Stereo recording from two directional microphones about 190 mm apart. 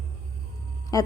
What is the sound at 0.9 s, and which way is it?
Speech, 20° left (ahead or behind).